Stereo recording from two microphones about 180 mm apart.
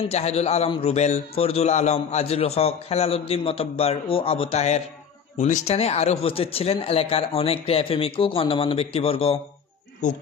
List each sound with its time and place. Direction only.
0.1 s a man's voice: 35° left (ahead or behind)